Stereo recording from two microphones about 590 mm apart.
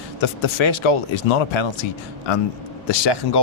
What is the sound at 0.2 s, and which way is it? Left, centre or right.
Speech, left.